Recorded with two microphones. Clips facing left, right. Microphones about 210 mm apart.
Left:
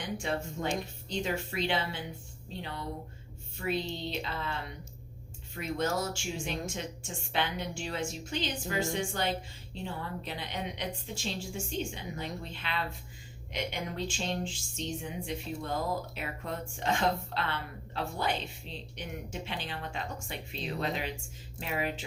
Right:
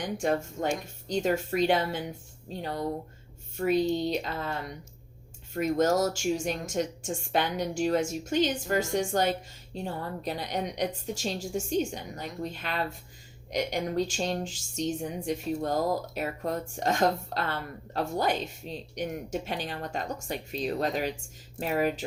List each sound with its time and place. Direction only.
0.0 s speech: 45° right (ahead or behind)